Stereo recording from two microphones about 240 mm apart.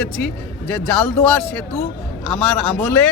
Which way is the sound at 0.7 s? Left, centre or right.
Centre.